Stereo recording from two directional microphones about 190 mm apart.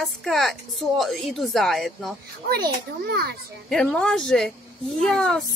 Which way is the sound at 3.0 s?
55° right (ahead or behind).